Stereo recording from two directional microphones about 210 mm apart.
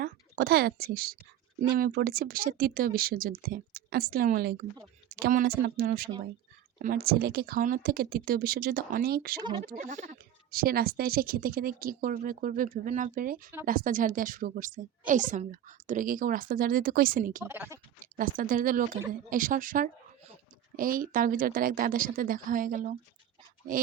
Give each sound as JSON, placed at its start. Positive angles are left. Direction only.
{"t": 0.0, "sound": "a woman's voice", "side_deg": -50}
{"t": 9.4, "sound": "speech", "side_deg": -20}
{"t": 9.6, "sound": "speech", "side_deg": -40}
{"t": 17.4, "sound": "speech", "side_deg": -10}
{"t": 18.0, "sound": "speech", "side_deg": -40}